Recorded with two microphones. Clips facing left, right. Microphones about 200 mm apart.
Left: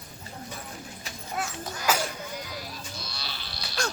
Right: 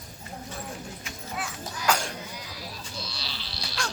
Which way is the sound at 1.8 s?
5° left (ahead or behind).